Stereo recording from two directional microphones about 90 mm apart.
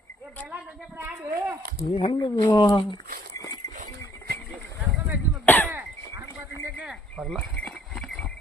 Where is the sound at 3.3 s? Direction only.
40° left (ahead or behind).